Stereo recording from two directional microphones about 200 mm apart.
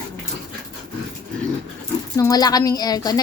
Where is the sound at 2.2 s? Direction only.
20° left (ahead or behind).